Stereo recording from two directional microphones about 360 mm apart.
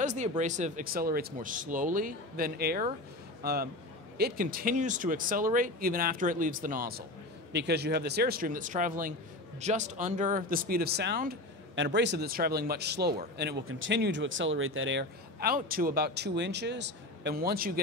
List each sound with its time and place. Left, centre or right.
0.0 s speech: centre